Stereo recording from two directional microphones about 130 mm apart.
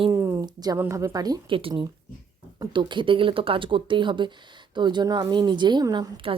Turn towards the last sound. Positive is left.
turn(degrees=-30)  # may be behind; listen again after turning